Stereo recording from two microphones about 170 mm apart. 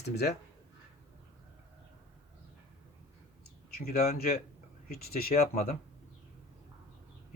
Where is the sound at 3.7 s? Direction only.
65° left (ahead or behind).